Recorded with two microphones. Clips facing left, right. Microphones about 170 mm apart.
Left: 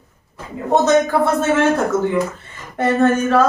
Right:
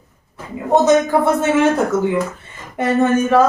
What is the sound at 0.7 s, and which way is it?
Speech, 15° right (ahead or behind).